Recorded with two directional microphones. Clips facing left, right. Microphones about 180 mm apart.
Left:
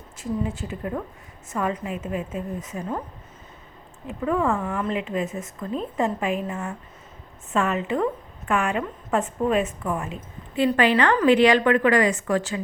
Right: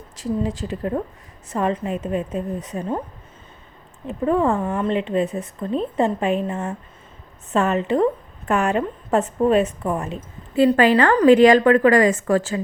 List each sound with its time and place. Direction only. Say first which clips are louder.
0.2 s a woman's voice: right 4 dB; 35° right (ahead or behind)
4.0 s a woman's voice: right 4 dB; 35° right (ahead or behind)